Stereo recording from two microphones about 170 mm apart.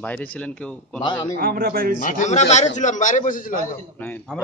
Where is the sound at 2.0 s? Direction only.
50° left (ahead or behind).